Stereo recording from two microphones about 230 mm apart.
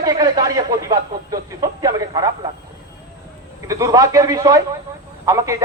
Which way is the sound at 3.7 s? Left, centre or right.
Centre.